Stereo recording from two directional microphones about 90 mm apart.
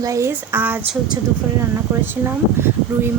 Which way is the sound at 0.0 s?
35° right (ahead or behind).